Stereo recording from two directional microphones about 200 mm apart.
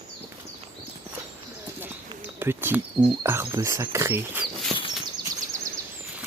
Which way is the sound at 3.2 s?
15° right (ahead or behind).